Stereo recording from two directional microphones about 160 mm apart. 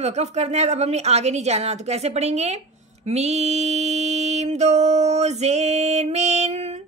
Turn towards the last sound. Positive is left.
turn(degrees=-45)  # may be behind; listen again after turning